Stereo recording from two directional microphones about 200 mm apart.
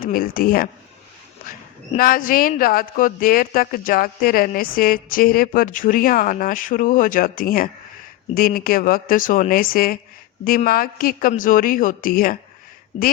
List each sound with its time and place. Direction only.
0.0 s speech: 45° left (ahead or behind)
2.0 s speech: 45° left (ahead or behind)